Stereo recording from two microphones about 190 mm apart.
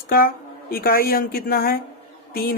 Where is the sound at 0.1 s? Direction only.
50° left (ahead or behind).